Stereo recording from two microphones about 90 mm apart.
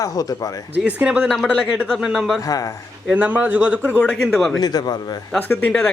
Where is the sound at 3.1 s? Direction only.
20° right (ahead or behind).